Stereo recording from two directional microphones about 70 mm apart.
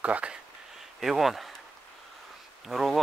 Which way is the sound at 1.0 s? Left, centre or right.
Centre.